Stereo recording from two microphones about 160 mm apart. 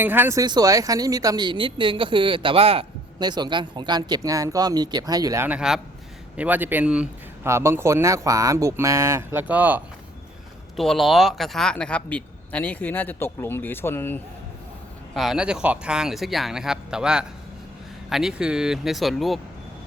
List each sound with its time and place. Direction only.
0.0 s speech: 10° right (ahead or behind)
5.5 s speech: 5° right (ahead or behind)
10.8 s speech: centre (ahead or behind)
15.1 s speech: centre (ahead or behind)